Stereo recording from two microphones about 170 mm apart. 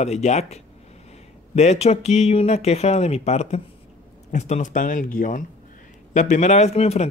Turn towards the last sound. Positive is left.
turn(degrees=40)  # may be behind; listen again after turning